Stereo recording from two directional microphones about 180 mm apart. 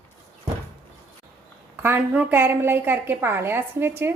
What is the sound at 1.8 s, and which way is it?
A woman's voice, 10° right (ahead or behind).